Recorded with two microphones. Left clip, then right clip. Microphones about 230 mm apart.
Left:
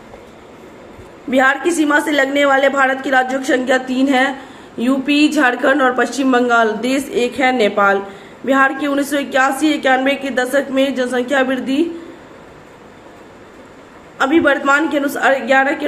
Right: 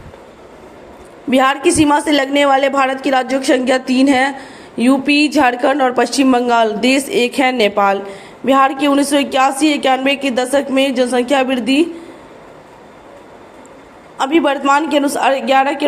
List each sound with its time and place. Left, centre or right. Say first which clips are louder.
1.3 s a woman's voice: right 1 dB; right
14.2 s a woman's voice: left 1 dB; right